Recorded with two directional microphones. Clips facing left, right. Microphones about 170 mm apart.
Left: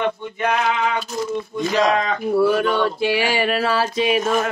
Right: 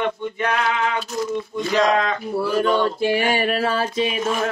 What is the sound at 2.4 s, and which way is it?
Mantra, 65° left (ahead or behind).